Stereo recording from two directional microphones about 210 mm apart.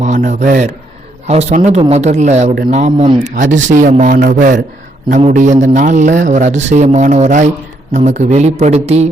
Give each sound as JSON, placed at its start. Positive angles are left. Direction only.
{"t": 0.0, "sound": "speech", "side_deg": -35}